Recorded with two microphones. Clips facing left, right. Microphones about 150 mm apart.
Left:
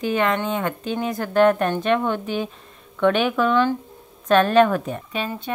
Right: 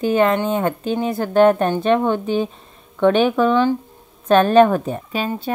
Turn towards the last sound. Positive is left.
turn(degrees=-35)  # may be behind; listen again after turning